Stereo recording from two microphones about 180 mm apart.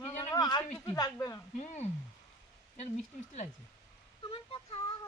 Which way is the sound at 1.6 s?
40° left (ahead or behind).